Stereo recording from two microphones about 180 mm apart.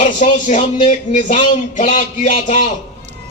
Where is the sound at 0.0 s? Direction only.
40° left (ahead or behind).